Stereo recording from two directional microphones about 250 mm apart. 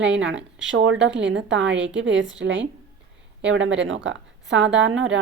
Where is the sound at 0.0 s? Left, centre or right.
Right.